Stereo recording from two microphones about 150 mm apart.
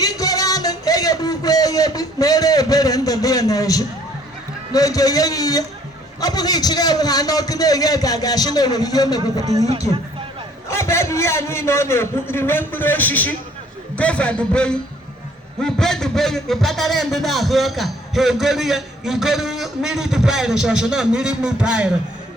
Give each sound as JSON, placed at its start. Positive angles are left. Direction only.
{"t": 0.0, "sound": "music", "side_deg": 25}
{"t": 4.7, "sound": "a man's voice", "side_deg": 25}
{"t": 10.7, "sound": "a man's voice", "side_deg": 20}